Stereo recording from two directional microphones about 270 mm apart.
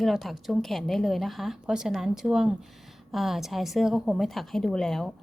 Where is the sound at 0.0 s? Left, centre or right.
Centre.